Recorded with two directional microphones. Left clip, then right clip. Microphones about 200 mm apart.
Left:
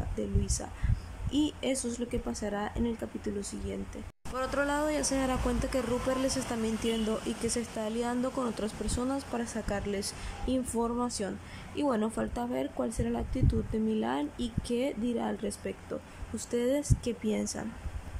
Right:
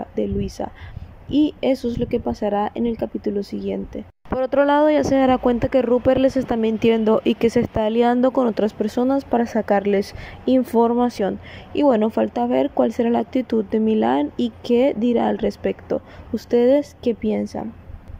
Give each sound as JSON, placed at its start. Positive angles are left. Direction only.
{"t": 0.1, "sound": "a woman's voice", "side_deg": -25}